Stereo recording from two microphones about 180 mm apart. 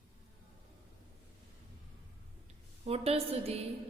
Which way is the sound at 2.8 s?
35° right (ahead or behind).